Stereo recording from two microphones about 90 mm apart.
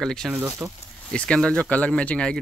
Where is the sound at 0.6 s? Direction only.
35° right (ahead or behind).